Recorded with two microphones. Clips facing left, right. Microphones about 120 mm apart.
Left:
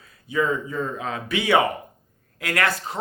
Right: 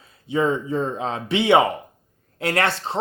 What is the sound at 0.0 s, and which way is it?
Speech, 25° right (ahead or behind).